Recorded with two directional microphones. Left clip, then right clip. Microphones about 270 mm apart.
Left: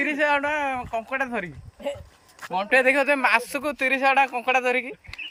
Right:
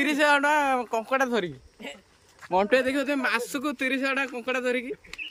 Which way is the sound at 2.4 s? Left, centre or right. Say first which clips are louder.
Right 2 dB; left.